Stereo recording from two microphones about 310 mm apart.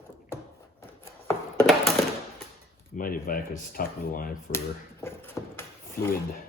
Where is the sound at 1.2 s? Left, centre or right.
Centre.